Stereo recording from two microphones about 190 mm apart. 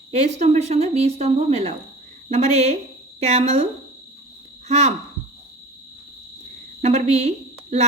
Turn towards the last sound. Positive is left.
turn(degrees=-35)  # may be behind; listen again after turning